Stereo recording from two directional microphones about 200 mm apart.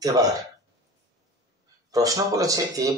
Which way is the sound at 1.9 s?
15° right (ahead or behind).